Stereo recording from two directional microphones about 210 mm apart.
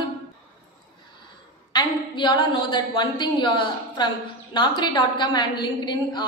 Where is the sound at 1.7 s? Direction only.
20° left (ahead or behind).